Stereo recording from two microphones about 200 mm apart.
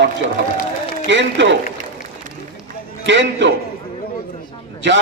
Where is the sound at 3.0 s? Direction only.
65° right (ahead or behind).